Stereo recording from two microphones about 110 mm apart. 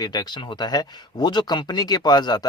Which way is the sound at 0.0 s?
40° left (ahead or behind).